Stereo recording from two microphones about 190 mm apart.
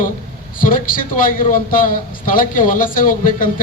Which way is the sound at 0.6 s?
45° left (ahead or behind).